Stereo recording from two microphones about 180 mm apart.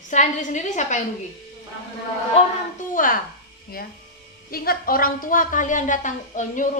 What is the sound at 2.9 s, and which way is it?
Speech, 50° left (ahead or behind).